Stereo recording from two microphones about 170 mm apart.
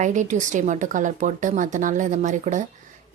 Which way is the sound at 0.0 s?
45° right (ahead or behind).